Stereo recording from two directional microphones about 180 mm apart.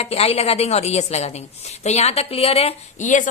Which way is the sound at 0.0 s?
35° left (ahead or behind).